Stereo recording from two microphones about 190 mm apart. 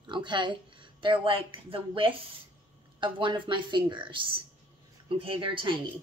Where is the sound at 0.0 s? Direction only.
25° right (ahead or behind).